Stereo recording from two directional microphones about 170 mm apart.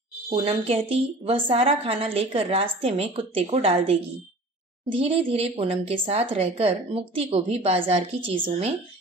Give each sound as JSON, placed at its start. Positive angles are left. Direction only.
{"t": 0.3, "sound": "a woman's voice", "side_deg": -35}